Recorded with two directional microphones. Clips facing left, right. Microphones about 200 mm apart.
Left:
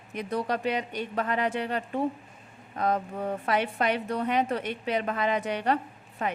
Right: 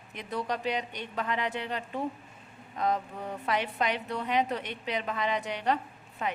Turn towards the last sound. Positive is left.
turn(degrees=50)  # may be behind; listen again after turning